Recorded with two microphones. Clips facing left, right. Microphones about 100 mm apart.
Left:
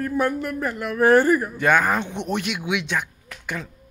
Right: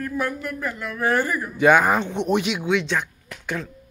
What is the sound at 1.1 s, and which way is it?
Speech, 35° left (ahead or behind).